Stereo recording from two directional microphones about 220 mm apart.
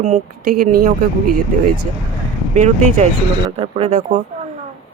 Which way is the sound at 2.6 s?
30° right (ahead or behind).